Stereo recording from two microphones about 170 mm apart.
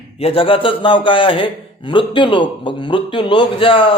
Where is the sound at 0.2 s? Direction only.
35° left (ahead or behind).